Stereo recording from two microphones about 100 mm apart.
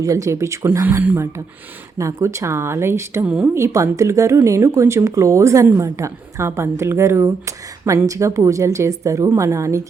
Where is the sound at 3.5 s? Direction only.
30° right (ahead or behind).